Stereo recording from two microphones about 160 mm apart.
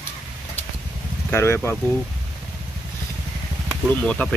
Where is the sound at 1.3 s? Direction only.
15° left (ahead or behind).